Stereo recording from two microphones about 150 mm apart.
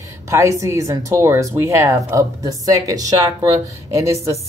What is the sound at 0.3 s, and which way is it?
Speech, 20° right (ahead or behind).